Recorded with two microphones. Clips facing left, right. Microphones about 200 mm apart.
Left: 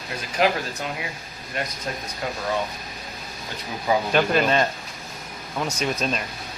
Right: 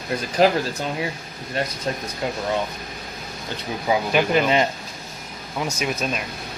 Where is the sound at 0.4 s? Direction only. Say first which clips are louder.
Right 4 dB; 35° right (ahead or behind).